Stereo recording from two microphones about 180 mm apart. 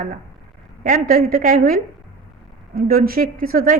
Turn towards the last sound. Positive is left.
turn(degrees=-50)  # may be behind; listen again after turning